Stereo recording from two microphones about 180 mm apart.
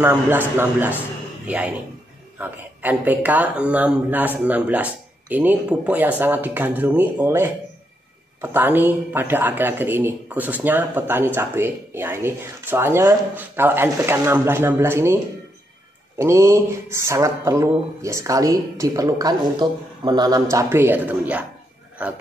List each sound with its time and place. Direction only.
0.0 s speech: 10° right (ahead or behind)
2.3 s speech: 10° right (ahead or behind)
16.2 s speech: 15° right (ahead or behind)